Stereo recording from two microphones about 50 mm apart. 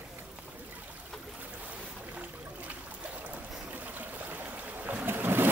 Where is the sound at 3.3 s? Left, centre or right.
Right.